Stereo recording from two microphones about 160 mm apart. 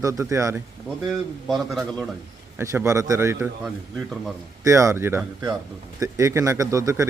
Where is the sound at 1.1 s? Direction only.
Centre (ahead or behind).